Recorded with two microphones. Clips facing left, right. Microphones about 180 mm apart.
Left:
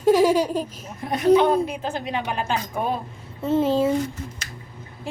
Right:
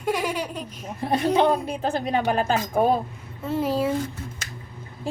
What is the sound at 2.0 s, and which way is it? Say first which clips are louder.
Speech: right 5 dB; 45° right (ahead or behind).